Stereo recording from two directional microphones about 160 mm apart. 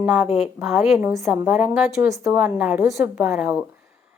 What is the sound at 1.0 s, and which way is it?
A woman's voice, 15° right (ahead or behind).